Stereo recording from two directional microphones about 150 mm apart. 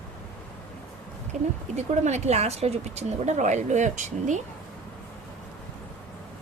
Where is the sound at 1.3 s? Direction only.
50° right (ahead or behind).